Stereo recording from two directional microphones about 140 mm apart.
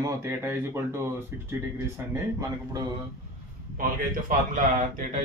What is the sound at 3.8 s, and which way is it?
Speech, 75° right (ahead or behind).